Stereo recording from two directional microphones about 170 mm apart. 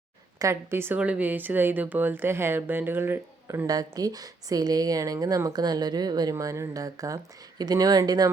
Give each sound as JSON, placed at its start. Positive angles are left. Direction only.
{"t": 0.3, "sound": "speech", "side_deg": -15}